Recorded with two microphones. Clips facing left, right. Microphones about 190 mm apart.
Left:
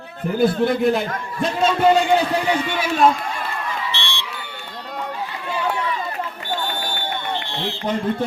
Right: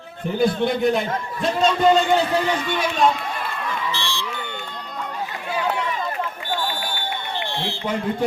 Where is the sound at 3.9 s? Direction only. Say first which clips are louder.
Right 2 dB; 65° left (ahead or behind).